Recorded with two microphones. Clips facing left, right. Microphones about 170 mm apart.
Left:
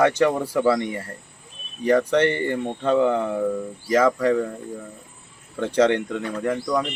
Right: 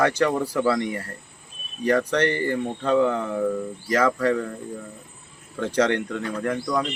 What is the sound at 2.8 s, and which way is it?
Speech, 10° left (ahead or behind).